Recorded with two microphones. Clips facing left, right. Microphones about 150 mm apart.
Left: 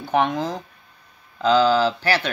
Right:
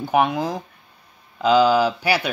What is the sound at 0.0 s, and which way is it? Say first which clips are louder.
Speech: right 2 dB; 10° right (ahead or behind).